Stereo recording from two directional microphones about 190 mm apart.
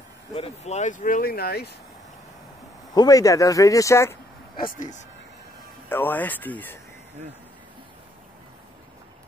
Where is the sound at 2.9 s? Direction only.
20° left (ahead or behind).